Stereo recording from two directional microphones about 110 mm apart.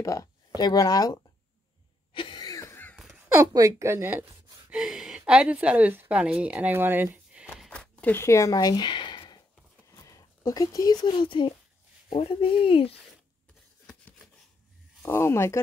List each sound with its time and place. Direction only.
0.0 s speech: 30° left (ahead or behind)
2.1 s cough: 45° left (ahead or behind)
2.7 s a sound: 15° left (ahead or behind)
3.3 s speech: 30° right (ahead or behind)
7.7 s speech: 10° left (ahead or behind); by 9.4 s 45° left (ahead or behind)
10.0 s speech: 30° left (ahead or behind); by 12.9 s 55° left (ahead or behind)
15.0 s speech: 20° left (ahead or behind)